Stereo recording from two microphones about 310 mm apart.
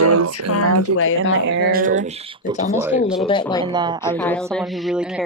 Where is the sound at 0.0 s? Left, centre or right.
Right.